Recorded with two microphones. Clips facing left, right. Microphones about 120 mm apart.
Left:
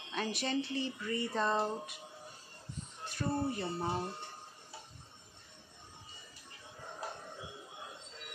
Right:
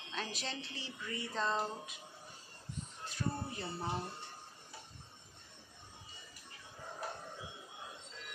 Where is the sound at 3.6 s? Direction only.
10° left (ahead or behind).